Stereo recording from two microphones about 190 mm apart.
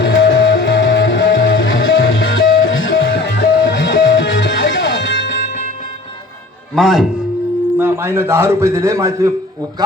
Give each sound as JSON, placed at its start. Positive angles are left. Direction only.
{"t": 0.0, "sound": "music", "side_deg": 70}
{"t": 6.7, "sound": "speech", "side_deg": 0}
{"t": 7.8, "sound": "a man's voice", "side_deg": -10}